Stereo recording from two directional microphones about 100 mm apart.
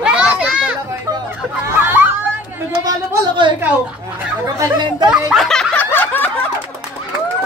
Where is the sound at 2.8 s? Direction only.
55° right (ahead or behind).